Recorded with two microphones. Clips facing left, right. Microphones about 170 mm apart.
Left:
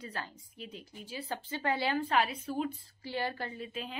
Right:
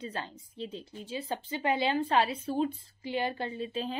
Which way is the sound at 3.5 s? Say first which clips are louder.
Right 6 dB; 30° right (ahead or behind).